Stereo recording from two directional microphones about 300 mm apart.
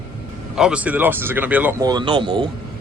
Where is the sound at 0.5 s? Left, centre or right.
Centre.